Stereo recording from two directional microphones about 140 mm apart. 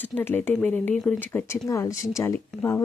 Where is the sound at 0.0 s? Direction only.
15° left (ahead or behind).